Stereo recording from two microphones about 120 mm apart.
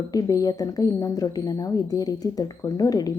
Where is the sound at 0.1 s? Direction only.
30° left (ahead or behind).